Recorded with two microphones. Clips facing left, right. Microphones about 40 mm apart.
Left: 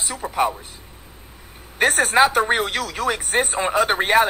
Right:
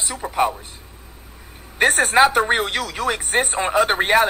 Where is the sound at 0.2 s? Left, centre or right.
Centre.